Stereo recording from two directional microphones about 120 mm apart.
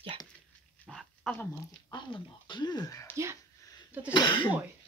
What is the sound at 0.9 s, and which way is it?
Dog, centre (ahead or behind).